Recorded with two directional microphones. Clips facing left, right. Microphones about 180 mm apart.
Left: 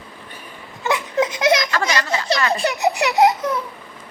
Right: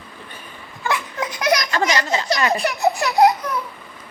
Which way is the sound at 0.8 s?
20° left (ahead or behind).